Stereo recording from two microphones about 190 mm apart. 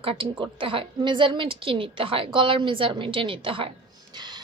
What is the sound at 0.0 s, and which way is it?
A woman's voice, 30° right (ahead or behind).